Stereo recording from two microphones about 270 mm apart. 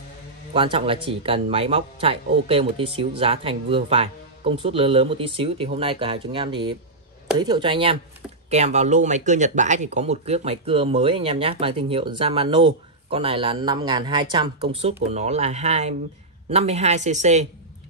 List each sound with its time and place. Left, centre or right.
0.5 s speech: centre